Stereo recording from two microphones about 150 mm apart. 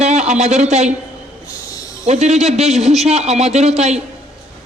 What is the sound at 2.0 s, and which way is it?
A man's voice, 50° right (ahead or behind).